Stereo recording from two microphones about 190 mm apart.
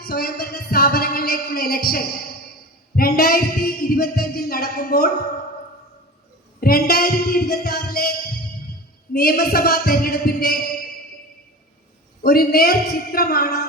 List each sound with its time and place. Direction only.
0.0 s music: 55° left (ahead or behind)
6.6 s music: 50° left (ahead or behind)
9.1 s music: 50° left (ahead or behind)
12.2 s music: 50° left (ahead or behind)